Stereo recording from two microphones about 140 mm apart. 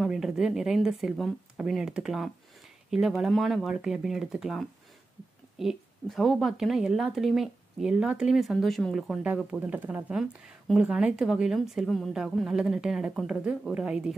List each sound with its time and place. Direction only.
0.0 s a woman's voice: 5° right (ahead or behind)